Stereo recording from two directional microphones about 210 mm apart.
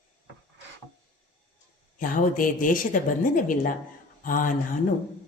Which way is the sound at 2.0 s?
40° left (ahead or behind).